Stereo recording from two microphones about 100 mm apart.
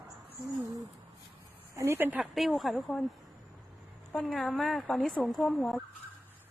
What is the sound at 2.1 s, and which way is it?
Speech, centre (ahead or behind).